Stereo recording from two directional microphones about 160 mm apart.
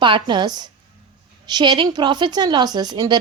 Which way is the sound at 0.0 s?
30° right (ahead or behind).